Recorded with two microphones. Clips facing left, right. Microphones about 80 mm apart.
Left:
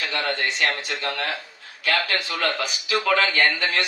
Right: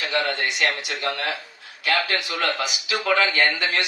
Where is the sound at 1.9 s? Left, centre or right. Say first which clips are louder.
Right 1 dB; centre.